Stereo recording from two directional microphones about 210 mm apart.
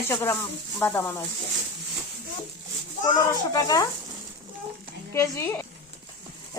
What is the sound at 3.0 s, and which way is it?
Speech, 15° left (ahead or behind).